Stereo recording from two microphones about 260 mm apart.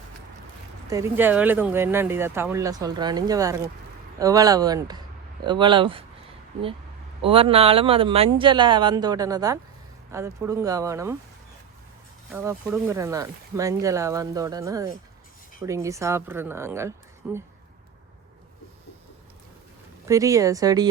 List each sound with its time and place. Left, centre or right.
0.9 s speech: centre
7.2 s speech: right
12.3 s speech: centre
20.1 s speech: centre